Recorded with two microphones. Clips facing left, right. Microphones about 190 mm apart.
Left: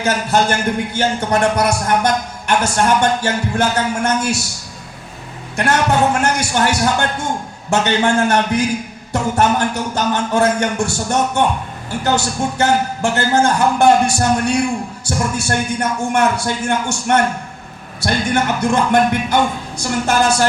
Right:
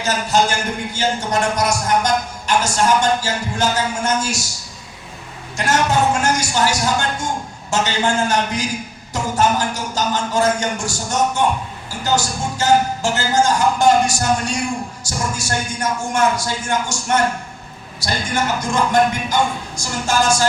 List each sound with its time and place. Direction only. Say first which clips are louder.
0.0 s a man's voice: left 2 dB; 55° left (ahead or behind)
5.5 s a man's voice: left 2 dB; 60° left (ahead or behind)